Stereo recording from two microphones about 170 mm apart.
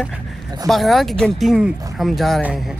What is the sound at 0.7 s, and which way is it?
Speech, centre (ahead or behind).